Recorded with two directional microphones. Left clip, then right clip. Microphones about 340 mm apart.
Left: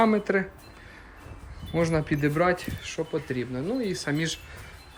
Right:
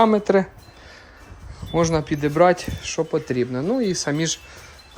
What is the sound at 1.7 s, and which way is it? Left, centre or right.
Speech, centre.